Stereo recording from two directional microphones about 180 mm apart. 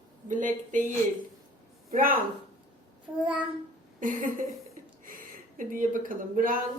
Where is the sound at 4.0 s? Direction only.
50° right (ahead or behind).